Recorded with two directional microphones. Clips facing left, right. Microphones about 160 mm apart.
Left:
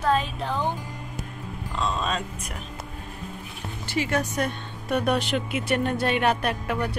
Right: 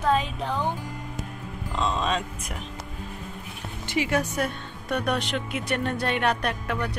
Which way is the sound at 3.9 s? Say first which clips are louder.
Right 1 dB; 10° right (ahead or behind).